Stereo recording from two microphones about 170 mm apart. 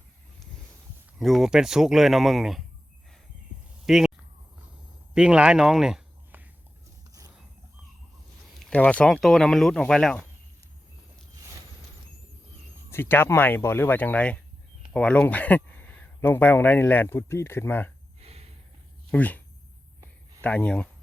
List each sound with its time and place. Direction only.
1.2 s speech: centre (ahead or behind)
3.8 s speech: centre (ahead or behind)
5.1 s speech: 5° right (ahead or behind)
7.1 s dog: 20° right (ahead or behind)
8.5 s speech: 10° left (ahead or behind)
12.9 s speech: 10° left (ahead or behind)
18.2 s snort: 35° right (ahead or behind)
19.1 s speech: 10° left (ahead or behind)
20.4 s speech: 10° left (ahead or behind)